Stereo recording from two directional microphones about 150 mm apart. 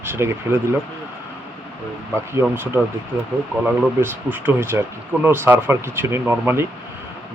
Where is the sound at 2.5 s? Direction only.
15° right (ahead or behind).